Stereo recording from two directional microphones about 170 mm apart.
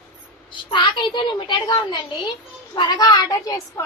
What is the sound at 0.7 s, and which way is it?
A woman's voice, 30° left (ahead or behind).